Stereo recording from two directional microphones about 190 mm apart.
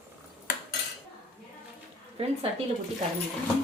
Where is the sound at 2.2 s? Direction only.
30° right (ahead or behind).